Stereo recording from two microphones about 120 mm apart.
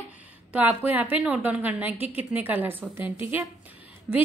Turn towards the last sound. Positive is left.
turn(degrees=-5)  # may be behind; listen again after turning